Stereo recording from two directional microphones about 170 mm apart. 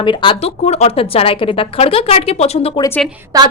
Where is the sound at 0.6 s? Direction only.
40° left (ahead or behind).